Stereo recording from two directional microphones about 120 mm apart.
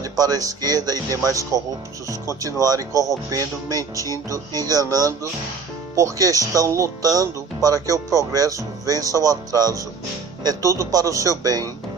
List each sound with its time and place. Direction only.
0.0 s speech: 30° right (ahead or behind)